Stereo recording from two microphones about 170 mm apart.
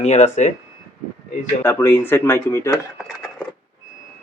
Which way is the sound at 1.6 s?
15° left (ahead or behind).